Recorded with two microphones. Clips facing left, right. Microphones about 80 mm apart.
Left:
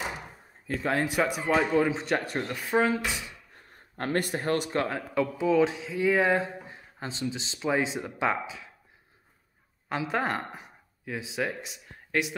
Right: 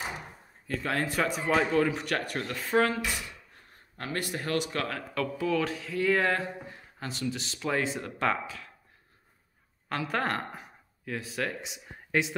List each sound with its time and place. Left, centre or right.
0.7 s speech: centre
1.9 s speech: left
3.9 s speech: left
4.7 s speech: left
9.8 s speech: centre
11.6 s speech: centre